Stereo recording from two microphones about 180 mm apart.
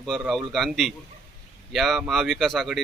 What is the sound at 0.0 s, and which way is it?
Speech, centre (ahead or behind).